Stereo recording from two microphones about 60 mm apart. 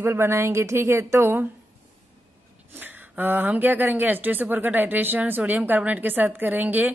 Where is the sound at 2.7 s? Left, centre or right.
Right.